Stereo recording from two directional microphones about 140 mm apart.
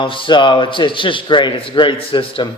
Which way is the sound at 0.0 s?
35° left (ahead or behind).